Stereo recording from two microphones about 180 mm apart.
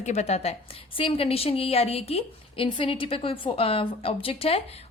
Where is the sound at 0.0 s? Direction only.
40° left (ahead or behind).